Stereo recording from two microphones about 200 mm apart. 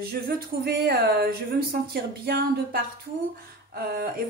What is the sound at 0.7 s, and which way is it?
Speech, 55° right (ahead or behind).